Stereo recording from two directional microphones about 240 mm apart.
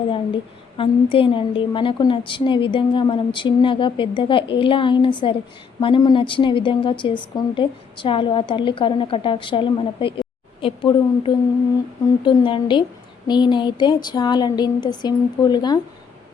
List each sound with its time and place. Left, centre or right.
0.8 s a woman's voice: left